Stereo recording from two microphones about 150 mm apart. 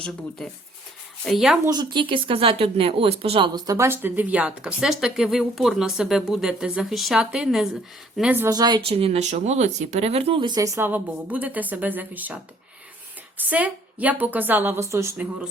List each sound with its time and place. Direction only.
1.2 s speech: centre (ahead or behind)
1.6 s speech: 30° right (ahead or behind); by 8.4 s 10° right (ahead or behind)
8.4 s speech: 25° right (ahead or behind)
8.8 s speech: 40° right (ahead or behind); by 12.4 s 10° right (ahead or behind)
13.4 s a woman's voice: 10° right (ahead or behind)